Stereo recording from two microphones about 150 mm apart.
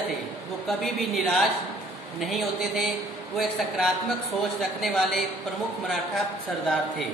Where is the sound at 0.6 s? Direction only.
Centre (ahead or behind).